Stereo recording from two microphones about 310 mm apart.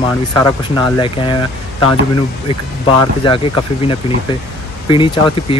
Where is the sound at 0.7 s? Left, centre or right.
Centre.